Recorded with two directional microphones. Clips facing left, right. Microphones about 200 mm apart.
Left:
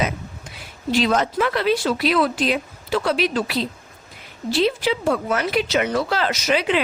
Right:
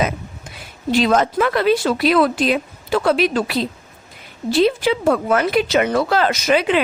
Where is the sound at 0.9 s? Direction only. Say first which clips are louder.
Right 3 dB; 50° right (ahead or behind).